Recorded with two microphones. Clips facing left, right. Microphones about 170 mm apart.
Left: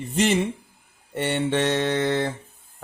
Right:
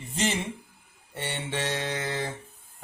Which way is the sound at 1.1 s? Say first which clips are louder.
Left 10 dB; 60° left (ahead or behind).